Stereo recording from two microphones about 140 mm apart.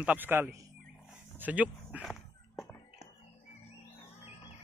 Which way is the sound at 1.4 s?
10° right (ahead or behind).